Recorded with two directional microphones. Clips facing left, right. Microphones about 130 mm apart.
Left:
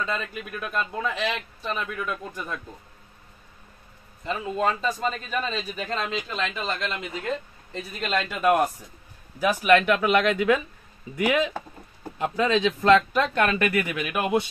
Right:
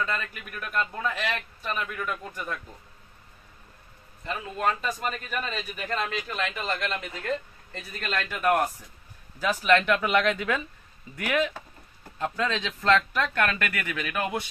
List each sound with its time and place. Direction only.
0.0 s a man's voice: 20° left (ahead or behind)
4.3 s a man's voice: 30° left (ahead or behind)